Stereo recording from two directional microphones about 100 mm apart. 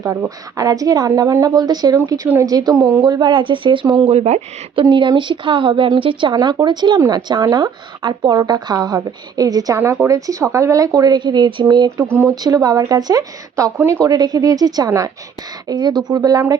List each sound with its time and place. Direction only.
0.5 s speech: 35° right (ahead or behind); by 3.8 s 55° right (ahead or behind)
4.0 s speech: 90° right
4.8 s a woman's voice: 50° right (ahead or behind)